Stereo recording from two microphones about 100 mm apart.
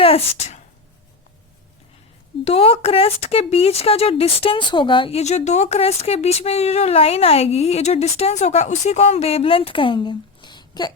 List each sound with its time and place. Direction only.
0.0 s speech: 75° left (ahead or behind)
2.4 s speech: 75° left (ahead or behind); by 5.1 s 55° left (ahead or behind)
5.1 s speech: 90° left; by 10.9 s 45° left (ahead or behind)